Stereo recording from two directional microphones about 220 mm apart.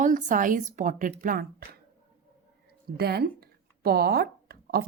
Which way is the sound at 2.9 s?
45° right (ahead or behind).